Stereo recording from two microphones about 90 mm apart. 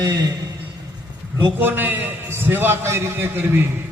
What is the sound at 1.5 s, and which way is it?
A man's voice, 20° right (ahead or behind).